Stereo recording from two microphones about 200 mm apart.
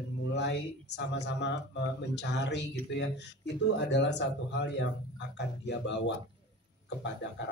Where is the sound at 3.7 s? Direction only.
60° left (ahead or behind).